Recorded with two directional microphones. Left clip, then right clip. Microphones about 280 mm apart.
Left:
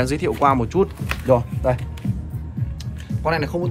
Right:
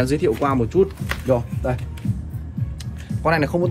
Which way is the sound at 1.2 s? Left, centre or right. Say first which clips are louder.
Left 4 dB; left.